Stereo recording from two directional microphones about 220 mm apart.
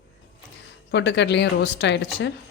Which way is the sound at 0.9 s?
55° left (ahead or behind).